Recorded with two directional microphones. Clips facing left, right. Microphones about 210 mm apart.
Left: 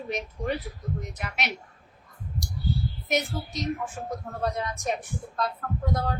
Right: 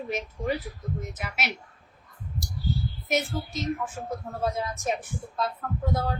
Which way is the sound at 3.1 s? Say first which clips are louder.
Right 1 dB; centre (ahead or behind).